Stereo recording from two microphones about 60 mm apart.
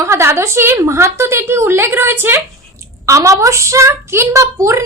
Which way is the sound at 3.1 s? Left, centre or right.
Right.